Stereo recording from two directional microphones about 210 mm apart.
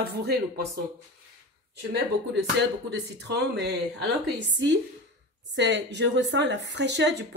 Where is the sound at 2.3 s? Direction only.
55° right (ahead or behind).